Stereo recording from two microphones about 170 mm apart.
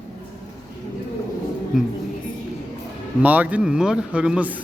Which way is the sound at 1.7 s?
Centre (ahead or behind).